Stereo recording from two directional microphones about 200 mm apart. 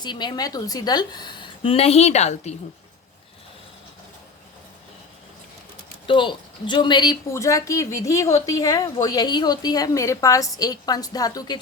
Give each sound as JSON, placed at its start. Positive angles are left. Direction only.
{"t": 0.0, "sound": "a woman's voice", "side_deg": 20}
{"t": 6.1, "sound": "speech", "side_deg": 25}